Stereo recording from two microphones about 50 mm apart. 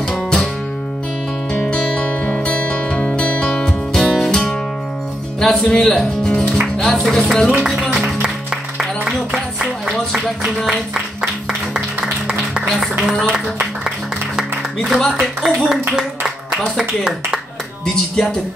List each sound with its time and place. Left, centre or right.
0.1 s music: centre
1.5 s music: left
5.4 s speech: centre
5.9 s speech: centre
8.7 s a sound: centre
13.0 s speech: centre
15.0 s speech: centre
17.9 s speech: centre